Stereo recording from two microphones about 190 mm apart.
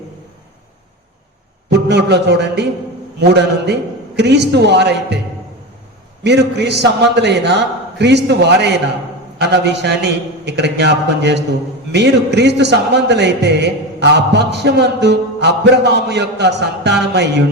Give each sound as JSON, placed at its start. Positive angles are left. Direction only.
{"t": 1.7, "sound": "a man's voice", "side_deg": -65}
{"t": 6.2, "sound": "a man's voice", "side_deg": -60}